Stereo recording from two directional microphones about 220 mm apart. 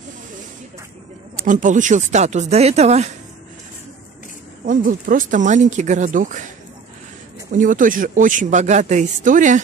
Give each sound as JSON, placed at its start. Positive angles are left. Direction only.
{"t": 1.3, "sound": "a man's voice", "side_deg": -35}
{"t": 4.6, "sound": "a man's voice", "side_deg": -35}
{"t": 7.5, "sound": "a man's voice", "side_deg": -35}